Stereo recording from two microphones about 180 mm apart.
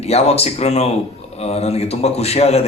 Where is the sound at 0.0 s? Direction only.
35° left (ahead or behind).